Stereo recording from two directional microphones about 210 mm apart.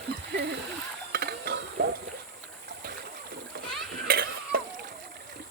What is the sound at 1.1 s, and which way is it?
Mechanisms, 50° right (ahead or behind).